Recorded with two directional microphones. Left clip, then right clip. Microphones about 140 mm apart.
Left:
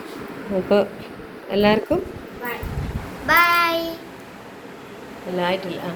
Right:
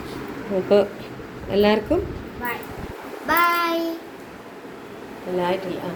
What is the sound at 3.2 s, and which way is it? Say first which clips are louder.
Child singing: left 3 dB; 25° right (ahead or behind).